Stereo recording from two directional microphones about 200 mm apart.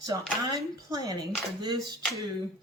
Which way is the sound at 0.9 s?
15° right (ahead or behind).